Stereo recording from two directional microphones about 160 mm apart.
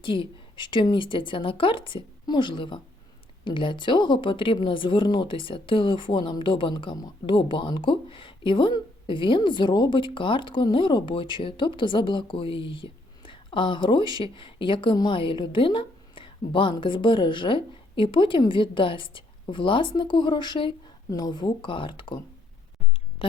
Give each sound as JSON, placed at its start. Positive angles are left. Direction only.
{"t": 0.0, "sound": "speech", "side_deg": 30}